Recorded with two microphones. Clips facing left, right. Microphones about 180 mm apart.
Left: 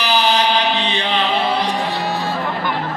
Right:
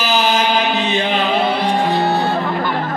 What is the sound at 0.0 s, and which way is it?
Chant, 45° right (ahead or behind).